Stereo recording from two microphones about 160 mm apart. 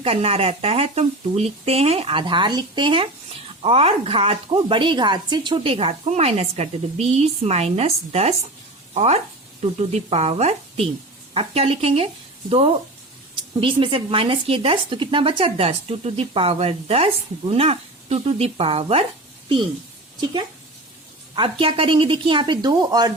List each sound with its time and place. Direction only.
0.0 s speech: 40° right (ahead or behind)
21.6 s speech: 35° right (ahead or behind)